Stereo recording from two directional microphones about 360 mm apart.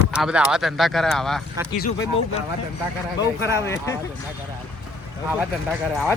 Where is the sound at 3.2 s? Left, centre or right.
Centre.